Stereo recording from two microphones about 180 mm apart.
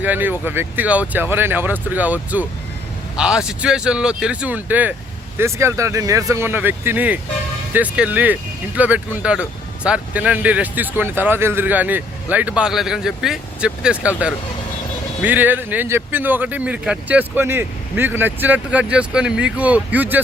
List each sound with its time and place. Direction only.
0.0 s speech: 10° right (ahead or behind)